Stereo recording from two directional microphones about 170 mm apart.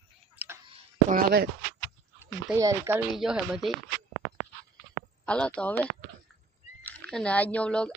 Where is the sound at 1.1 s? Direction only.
65° right (ahead or behind).